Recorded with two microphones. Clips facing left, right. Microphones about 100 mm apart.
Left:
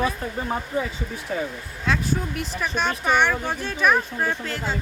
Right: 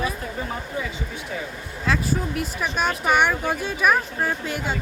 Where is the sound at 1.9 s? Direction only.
5° right (ahead or behind).